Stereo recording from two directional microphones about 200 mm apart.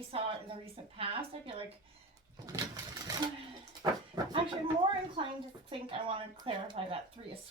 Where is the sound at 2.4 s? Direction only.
20° right (ahead or behind).